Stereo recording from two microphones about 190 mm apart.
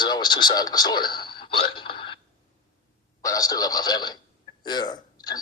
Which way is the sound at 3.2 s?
20° left (ahead or behind).